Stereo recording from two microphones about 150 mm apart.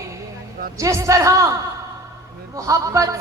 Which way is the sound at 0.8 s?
20° right (ahead or behind).